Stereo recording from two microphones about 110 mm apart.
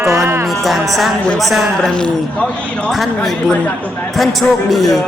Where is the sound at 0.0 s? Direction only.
25° right (ahead or behind).